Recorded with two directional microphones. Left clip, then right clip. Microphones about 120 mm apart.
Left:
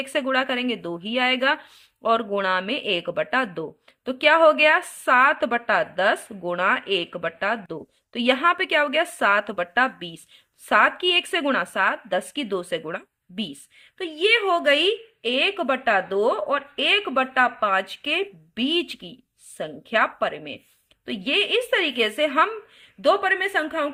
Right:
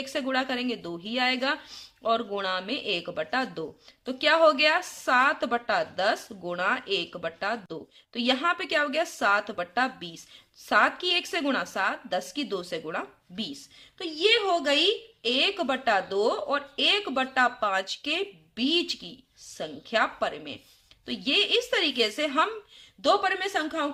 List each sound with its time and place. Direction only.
0.0 s speech: 25° left (ahead or behind)
14.0 s a woman's voice: 40° left (ahead or behind)
15.2 s speech: 25° left (ahead or behind)
23.0 s a woman's voice: 40° left (ahead or behind)